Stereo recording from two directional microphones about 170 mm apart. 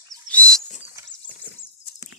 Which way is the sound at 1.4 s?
90° left.